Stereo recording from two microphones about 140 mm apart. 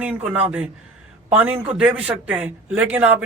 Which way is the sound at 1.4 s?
10° right (ahead or behind).